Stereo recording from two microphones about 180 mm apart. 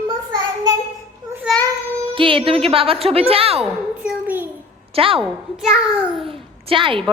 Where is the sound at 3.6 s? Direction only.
5° right (ahead or behind).